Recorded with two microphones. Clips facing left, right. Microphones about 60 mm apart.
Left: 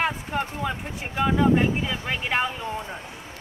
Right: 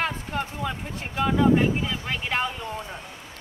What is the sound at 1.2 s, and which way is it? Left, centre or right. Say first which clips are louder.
Speech: even; centre.